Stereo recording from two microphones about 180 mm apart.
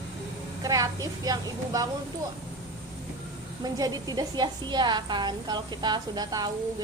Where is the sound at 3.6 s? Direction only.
20° right (ahead or behind).